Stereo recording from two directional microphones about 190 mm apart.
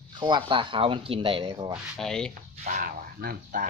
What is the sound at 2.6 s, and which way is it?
Speech, 50° right (ahead or behind).